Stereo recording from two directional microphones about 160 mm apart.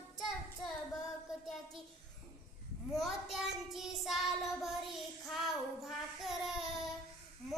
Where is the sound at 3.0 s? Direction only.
Centre (ahead or behind).